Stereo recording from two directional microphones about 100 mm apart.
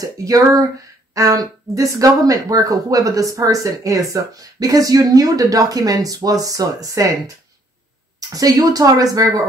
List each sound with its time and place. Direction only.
0.0 s speech: 35° right (ahead or behind)
8.2 s speech: 35° right (ahead or behind)